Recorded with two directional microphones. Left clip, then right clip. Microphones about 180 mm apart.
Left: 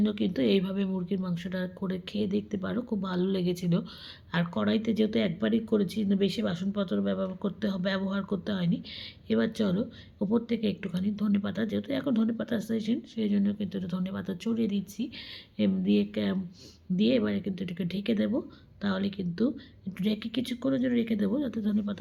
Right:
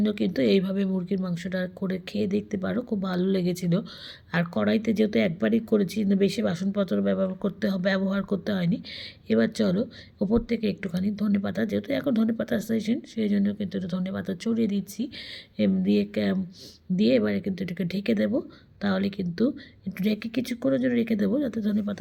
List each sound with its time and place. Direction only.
0.0 s speech: 35° right (ahead or behind)